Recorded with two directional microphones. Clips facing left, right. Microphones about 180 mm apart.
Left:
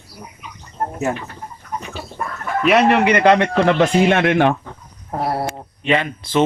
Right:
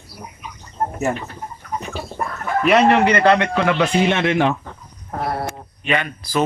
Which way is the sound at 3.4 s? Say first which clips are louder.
Left 3 dB; 45° left (ahead or behind).